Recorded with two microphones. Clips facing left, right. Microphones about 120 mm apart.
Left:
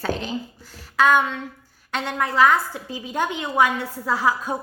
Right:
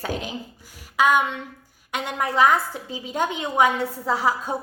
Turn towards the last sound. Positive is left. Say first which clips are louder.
# left 1 dB
turn(degrees=-25)  # may be behind; listen again after turning